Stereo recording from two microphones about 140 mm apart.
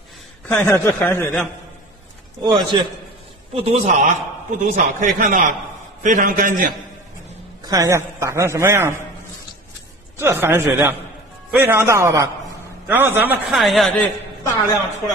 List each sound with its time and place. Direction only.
0.5 s speech: 15° left (ahead or behind)
2.4 s a man's voice: 30° right (ahead or behind)
3.5 s a man's voice: 45° right (ahead or behind); by 6.7 s 75° right (ahead or behind)
7.6 s a man's voice: 25° right (ahead or behind)
10.1 s a man's voice: 15° right (ahead or behind)
13.5 s speech: centre (ahead or behind)
14.0 s a man's voice: 25° left (ahead or behind)